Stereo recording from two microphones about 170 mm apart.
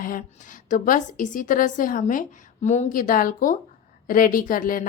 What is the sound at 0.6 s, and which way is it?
A woman's voice, 50° left (ahead or behind).